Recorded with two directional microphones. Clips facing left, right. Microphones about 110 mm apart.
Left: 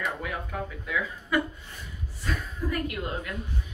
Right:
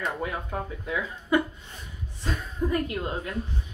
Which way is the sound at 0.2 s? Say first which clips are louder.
Right 2 dB; 30° right (ahead or behind).